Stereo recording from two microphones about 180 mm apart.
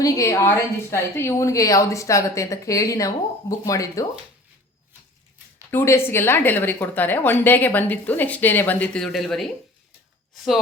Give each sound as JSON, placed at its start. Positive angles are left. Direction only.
{"t": 0.0, "sound": "speech", "side_deg": 15}
{"t": 5.7, "sound": "speech", "side_deg": 15}